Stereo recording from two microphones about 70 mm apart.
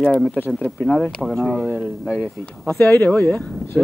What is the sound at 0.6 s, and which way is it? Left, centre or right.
Speech, centre.